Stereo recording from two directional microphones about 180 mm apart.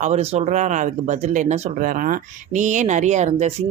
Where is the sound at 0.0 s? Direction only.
35° right (ahead or behind).